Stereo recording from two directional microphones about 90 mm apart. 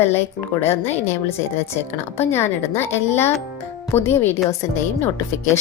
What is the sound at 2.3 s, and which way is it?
A woman's voice, 25° left (ahead or behind).